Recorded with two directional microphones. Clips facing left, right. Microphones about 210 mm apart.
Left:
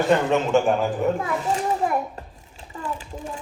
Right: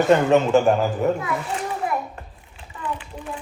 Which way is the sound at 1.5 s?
35° left (ahead or behind).